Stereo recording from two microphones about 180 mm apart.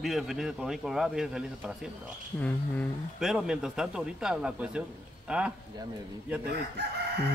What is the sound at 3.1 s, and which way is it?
A man's voice, centre (ahead or behind).